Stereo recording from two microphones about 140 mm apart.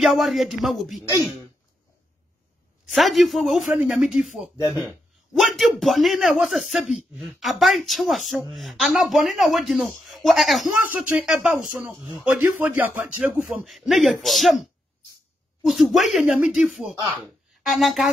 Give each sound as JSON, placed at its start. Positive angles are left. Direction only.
{"t": 0.0, "sound": "a man's voice", "side_deg": 0}
{"t": 2.9, "sound": "a man's voice", "side_deg": 0}
{"t": 4.6, "sound": "speech", "side_deg": 25}
{"t": 5.3, "sound": "a man's voice", "side_deg": 0}
{"t": 10.8, "sound": "speech", "side_deg": -10}
{"t": 12.4, "sound": "a man's voice", "side_deg": -15}